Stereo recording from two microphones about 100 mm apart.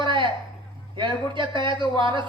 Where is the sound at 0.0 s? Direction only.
55° right (ahead or behind).